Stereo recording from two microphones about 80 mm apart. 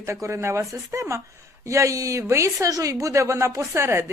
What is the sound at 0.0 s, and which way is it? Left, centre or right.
Speech, right.